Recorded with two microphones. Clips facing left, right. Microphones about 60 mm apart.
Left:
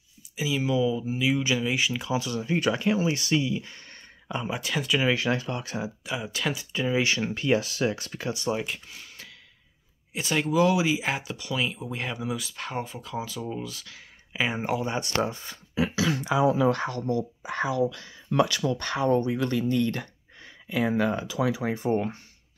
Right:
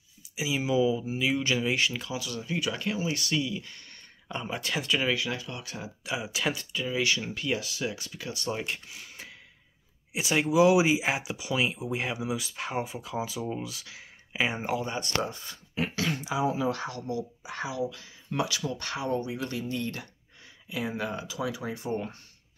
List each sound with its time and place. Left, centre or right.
0.2 s speech: centre
2.1 s speech: left
4.3 s speech: centre
5.1 s speech: left
6.0 s speech: centre
6.7 s speech: left
8.3 s speech: left
8.5 s speech: centre
14.8 s speech: left
16.1 s speech: left
16.7 s speech: left
17.8 s speech: left
21.4 s speech: left
21.7 s speech: left